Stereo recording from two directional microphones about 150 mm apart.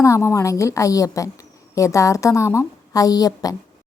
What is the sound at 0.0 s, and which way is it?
A woman's voice, 20° left (ahead or behind).